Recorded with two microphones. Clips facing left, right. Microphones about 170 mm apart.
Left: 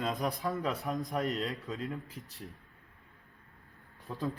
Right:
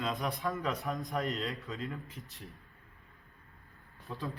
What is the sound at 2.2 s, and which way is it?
Speech, 40° left (ahead or behind).